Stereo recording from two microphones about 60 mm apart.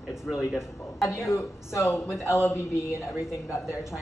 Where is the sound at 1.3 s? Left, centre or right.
Left.